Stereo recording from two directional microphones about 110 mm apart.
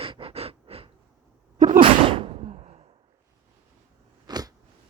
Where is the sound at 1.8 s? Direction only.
50° right (ahead or behind); by 2.8 s 75° right (ahead or behind).